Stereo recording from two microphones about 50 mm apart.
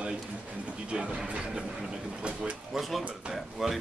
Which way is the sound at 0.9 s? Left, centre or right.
Right.